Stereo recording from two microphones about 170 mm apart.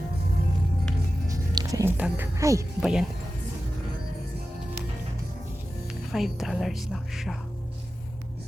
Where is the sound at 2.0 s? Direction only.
10° right (ahead or behind).